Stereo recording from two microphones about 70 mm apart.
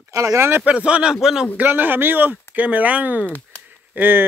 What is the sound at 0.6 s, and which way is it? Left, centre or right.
Speech, centre.